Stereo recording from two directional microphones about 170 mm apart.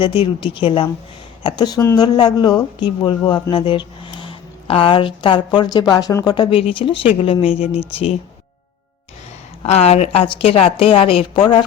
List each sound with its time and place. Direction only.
0.0 s speech: 30° left (ahead or behind)
9.6 s speech: 40° left (ahead or behind)